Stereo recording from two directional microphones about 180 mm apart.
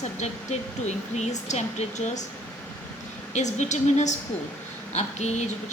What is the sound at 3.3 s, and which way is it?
A woman's voice, 40° left (ahead or behind).